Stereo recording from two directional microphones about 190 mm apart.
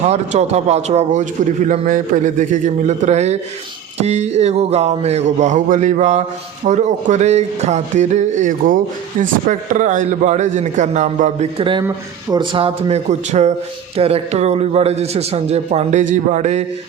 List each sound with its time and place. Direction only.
0.1 s a man's voice: 35° right (ahead or behind)